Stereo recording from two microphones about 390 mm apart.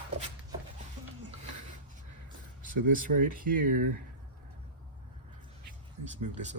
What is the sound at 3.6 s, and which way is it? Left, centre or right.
Speech, right.